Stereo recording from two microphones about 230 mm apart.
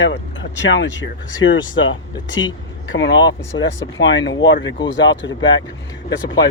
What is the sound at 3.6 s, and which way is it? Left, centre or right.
Speech, left.